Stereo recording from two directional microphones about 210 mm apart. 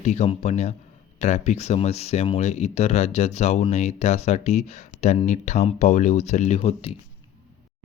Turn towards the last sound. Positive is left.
turn(degrees=30)  # may be behind; listen again after turning